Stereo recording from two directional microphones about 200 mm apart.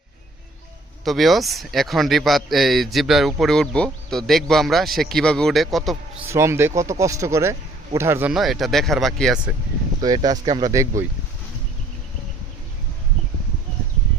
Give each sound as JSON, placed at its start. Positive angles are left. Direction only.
{"t": 1.0, "sound": "speech", "side_deg": 0}
{"t": 6.3, "sound": "speech", "side_deg": -15}
{"t": 10.0, "sound": "speech", "side_deg": -20}